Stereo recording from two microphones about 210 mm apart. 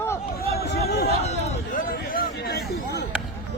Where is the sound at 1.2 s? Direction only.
35° left (ahead or behind).